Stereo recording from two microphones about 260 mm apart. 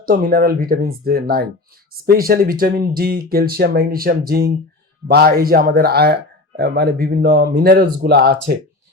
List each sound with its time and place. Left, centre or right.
0.0 s speech: right